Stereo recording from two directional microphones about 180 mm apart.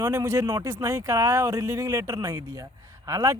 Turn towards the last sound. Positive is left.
turn(degrees=-20)  # may be behind; listen again after turning